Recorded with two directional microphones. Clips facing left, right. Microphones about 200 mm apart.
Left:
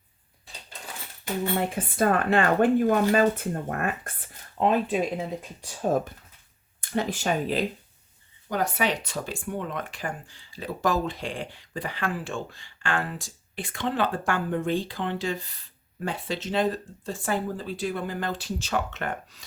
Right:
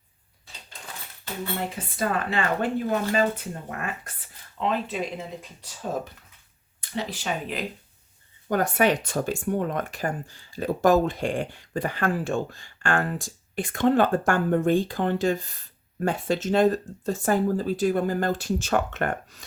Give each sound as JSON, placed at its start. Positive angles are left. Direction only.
{"t": 2.0, "sound": "speech", "side_deg": 55}
{"t": 6.9, "sound": "speech", "side_deg": 50}
{"t": 8.4, "sound": "speech", "side_deg": -50}